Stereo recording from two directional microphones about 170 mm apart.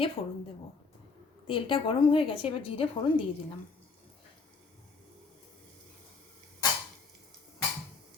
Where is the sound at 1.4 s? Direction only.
30° left (ahead or behind).